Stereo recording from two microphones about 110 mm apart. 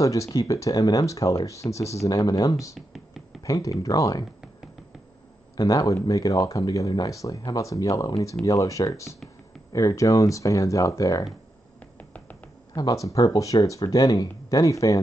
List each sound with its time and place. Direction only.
0.0 s speech: 30° left (ahead or behind)
5.6 s speech: 35° left (ahead or behind)
12.0 s finger snapping: 15° left (ahead or behind)
12.7 s speech: 35° left (ahead or behind)